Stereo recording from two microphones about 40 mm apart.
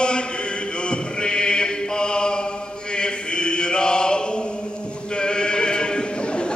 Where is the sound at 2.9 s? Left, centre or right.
Left.